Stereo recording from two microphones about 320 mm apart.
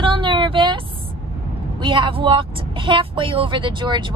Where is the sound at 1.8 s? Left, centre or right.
Centre.